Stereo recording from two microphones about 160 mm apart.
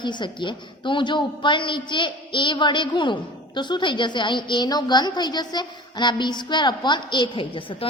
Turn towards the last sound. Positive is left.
turn(degrees=35)  # may be behind; listen again after turning